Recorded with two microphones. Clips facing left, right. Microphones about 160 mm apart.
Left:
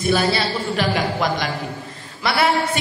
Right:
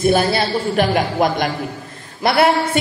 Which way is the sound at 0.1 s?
50° right (ahead or behind).